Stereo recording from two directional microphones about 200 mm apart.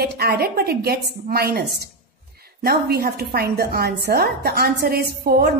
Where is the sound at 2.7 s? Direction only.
50° right (ahead or behind).